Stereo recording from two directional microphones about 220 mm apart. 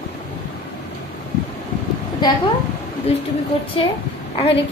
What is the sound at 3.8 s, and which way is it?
Speech, 25° left (ahead or behind).